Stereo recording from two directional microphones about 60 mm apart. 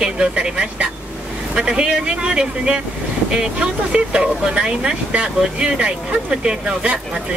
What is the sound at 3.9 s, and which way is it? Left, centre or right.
Speech, centre.